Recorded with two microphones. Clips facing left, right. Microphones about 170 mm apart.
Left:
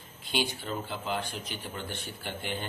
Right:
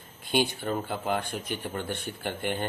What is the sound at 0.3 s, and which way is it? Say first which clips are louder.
Speech: right 5 dB; 50° right (ahead or behind).